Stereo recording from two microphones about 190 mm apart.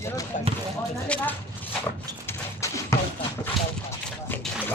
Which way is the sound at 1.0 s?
10° left (ahead or behind).